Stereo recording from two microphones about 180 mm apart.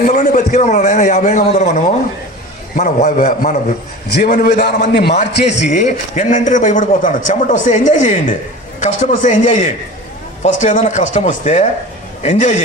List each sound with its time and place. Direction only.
0.0 s a man's voice: 45° left (ahead or behind)
5.5 s a man's voice: 40° left (ahead or behind)